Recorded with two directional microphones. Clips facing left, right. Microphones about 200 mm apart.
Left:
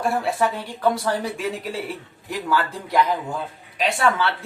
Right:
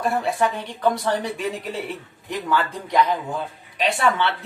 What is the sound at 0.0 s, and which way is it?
Speech, 5° left (ahead or behind).